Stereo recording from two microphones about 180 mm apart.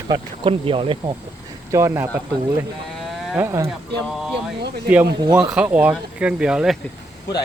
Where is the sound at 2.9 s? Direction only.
Centre (ahead or behind).